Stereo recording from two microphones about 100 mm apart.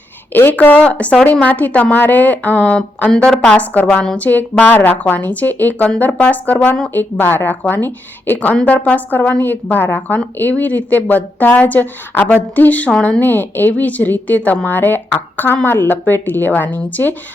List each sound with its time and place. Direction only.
0.3 s speech: 20° left (ahead or behind)
4.2 s speech: 15° left (ahead or behind)